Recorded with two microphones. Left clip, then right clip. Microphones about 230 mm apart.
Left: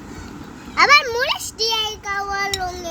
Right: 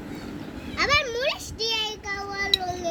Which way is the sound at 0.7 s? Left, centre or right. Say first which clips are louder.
Left 9 dB; left.